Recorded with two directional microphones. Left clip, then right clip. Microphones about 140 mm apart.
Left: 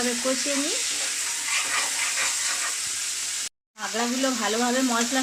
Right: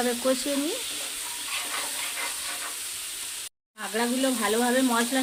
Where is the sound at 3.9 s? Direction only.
30° right (ahead or behind).